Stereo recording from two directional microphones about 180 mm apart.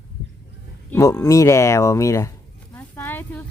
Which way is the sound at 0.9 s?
15° left (ahead or behind).